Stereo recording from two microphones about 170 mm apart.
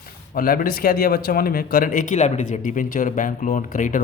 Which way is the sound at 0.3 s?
55° left (ahead or behind).